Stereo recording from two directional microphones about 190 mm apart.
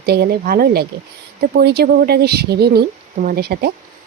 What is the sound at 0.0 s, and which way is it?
Speech, 55° right (ahead or behind).